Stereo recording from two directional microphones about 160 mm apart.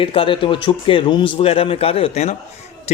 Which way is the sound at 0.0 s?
35° left (ahead or behind).